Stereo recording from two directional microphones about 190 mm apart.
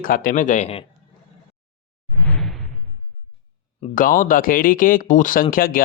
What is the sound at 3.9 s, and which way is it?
Speech, 45° left (ahead or behind).